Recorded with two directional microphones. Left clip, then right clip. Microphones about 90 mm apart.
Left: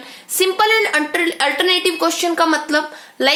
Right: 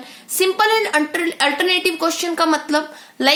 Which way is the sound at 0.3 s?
40° right (ahead or behind).